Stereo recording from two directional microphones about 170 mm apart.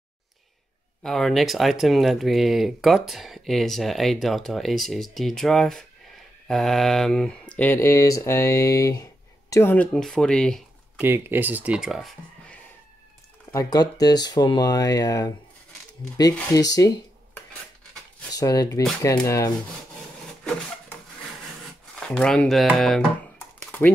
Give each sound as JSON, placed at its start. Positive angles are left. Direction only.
{"t": 1.0, "sound": "speech", "side_deg": 0}
{"t": 11.0, "sound": "speech", "side_deg": -10}
{"t": 13.5, "sound": "speech", "side_deg": 20}
{"t": 16.5, "sound": "speech", "side_deg": 20}
{"t": 18.3, "sound": "speech", "side_deg": 20}
{"t": 22.0, "sound": "speech", "side_deg": 5}
{"t": 23.6, "sound": "typing", "side_deg": 10}